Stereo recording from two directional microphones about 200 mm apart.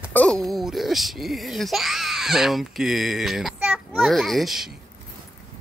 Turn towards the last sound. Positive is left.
turn(degrees=0)  # may be behind; listen again after turning